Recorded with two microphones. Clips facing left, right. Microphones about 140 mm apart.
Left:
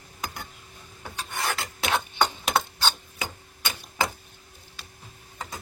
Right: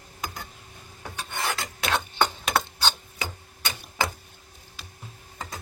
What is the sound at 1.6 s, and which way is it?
Filing, 10° left (ahead or behind).